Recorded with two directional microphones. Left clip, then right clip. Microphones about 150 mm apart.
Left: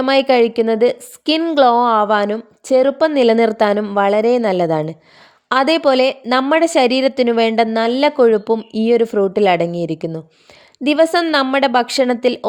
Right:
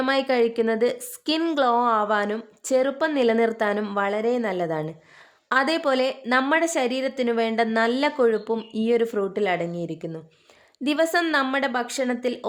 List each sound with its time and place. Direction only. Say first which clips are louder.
0.0 s a woman's voice: left 8 dB; 35° left (ahead or behind)
10.8 s a woman's voice: left 8 dB; 35° left (ahead or behind)